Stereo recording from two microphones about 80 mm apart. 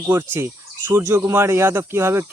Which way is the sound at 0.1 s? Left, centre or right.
Right.